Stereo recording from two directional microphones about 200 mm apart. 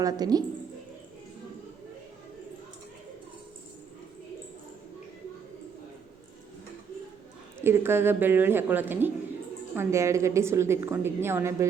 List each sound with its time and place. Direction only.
0.0 s speech: 20° right (ahead or behind)
7.6 s a woman's voice: 10° right (ahead or behind)